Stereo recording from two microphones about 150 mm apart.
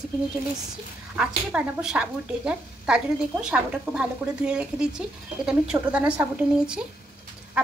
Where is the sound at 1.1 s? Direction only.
5° right (ahead or behind).